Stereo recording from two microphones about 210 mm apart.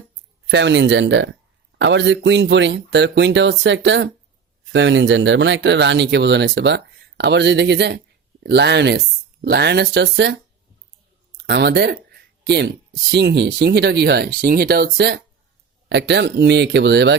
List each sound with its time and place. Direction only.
0.4 s speech: 55° right (ahead or behind)
11.3 s a sound: 50° right (ahead or behind)
13.1 s speech: 55° right (ahead or behind)